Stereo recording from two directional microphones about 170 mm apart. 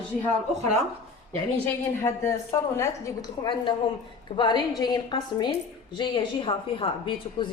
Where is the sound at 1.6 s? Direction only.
15° left (ahead or behind).